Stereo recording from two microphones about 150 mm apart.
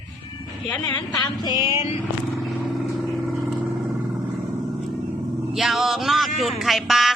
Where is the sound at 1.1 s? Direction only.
25° left (ahead or behind).